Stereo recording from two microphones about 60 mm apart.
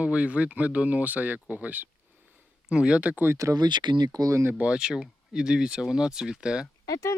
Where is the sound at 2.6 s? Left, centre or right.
Centre.